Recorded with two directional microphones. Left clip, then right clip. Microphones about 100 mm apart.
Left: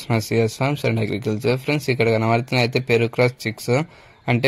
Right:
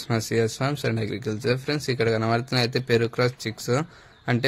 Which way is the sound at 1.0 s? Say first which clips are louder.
Left 5 dB; 50° left (ahead or behind).